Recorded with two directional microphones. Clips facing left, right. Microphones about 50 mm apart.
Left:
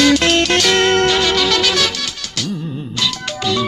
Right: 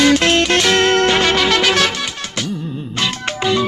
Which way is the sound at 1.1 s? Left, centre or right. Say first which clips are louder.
Right 1 dB; right.